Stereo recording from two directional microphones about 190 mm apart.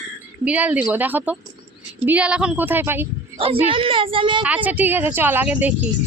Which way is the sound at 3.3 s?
30° right (ahead or behind).